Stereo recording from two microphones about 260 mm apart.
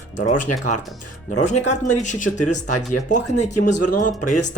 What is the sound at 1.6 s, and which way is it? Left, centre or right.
Speech, left.